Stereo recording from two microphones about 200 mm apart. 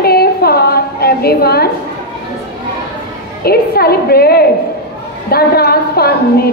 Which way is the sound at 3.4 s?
50° left (ahead or behind).